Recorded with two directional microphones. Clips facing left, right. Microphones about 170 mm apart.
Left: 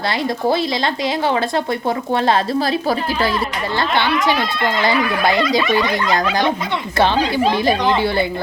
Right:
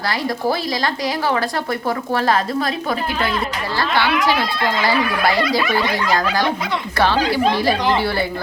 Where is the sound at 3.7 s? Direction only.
20° left (ahead or behind).